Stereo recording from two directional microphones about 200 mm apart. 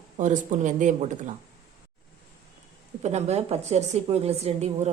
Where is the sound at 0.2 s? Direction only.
40° right (ahead or behind).